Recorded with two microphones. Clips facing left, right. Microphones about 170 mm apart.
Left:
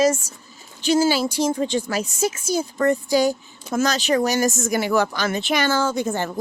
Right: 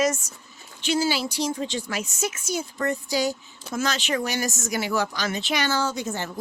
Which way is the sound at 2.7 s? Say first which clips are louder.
Left 7 dB; 50° left (ahead or behind).